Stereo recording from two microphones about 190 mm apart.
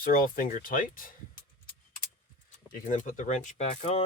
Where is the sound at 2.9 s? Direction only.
45° left (ahead or behind).